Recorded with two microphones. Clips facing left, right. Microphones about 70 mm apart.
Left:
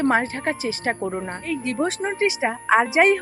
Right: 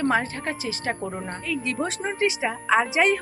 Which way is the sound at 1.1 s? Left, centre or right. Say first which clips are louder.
Left 4 dB; centre.